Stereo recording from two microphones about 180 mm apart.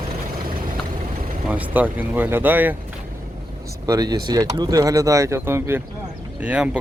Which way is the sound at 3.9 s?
20° right (ahead or behind).